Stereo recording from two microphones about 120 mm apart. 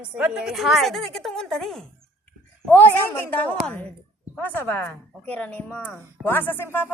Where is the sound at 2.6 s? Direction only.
15° left (ahead or behind).